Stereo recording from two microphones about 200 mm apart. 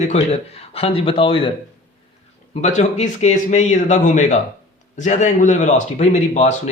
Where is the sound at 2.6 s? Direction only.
35° left (ahead or behind).